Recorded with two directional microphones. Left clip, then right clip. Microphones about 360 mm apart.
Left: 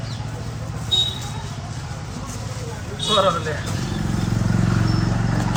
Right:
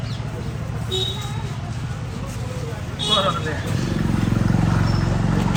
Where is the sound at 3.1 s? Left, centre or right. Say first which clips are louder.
Left 2 dB; left.